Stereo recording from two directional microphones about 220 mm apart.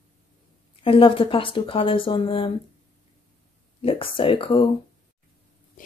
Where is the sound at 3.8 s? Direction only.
25° left (ahead or behind).